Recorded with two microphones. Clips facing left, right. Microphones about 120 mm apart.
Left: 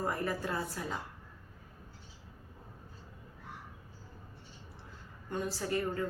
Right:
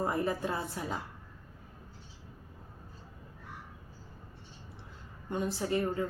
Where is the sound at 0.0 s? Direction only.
20° right (ahead or behind).